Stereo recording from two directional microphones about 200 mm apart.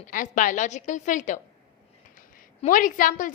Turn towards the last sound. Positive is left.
turn(degrees=40)  # may be behind; listen again after turning